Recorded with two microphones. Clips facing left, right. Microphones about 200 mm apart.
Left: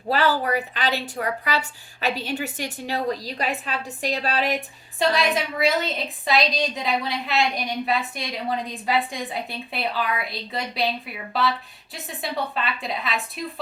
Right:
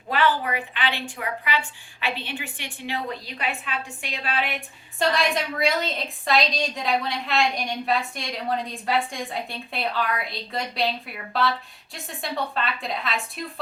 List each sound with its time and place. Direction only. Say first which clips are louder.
0.1 s a woman's voice: left 2 dB; 40° left (ahead or behind)
4.9 s a woman's voice: left 2 dB; centre (ahead or behind)